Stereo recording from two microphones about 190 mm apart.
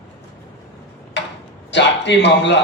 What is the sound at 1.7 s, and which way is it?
Speech, 65° left (ahead or behind).